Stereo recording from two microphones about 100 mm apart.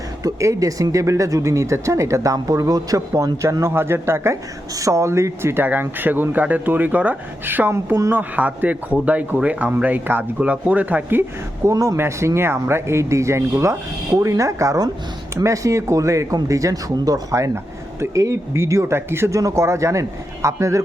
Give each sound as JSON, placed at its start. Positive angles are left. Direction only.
{"t": 0.2, "sound": "speech", "side_deg": -35}
{"t": 3.6, "sound": "a man's voice", "side_deg": -25}
{"t": 11.7, "sound": "speech", "side_deg": -35}